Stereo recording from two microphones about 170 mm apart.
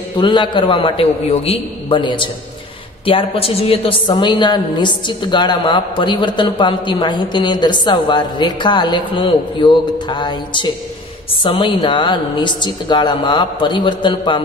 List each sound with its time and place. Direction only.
0.2 s a woman's voice: 30° left (ahead or behind)